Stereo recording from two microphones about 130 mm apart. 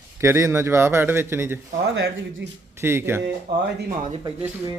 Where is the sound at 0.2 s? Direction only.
20° right (ahead or behind).